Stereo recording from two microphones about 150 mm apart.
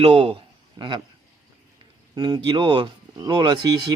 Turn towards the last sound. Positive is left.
turn(degrees=-30)  # may be behind; listen again after turning